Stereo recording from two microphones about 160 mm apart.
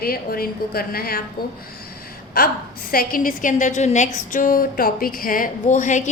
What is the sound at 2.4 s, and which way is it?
A woman's voice, 65° left (ahead or behind).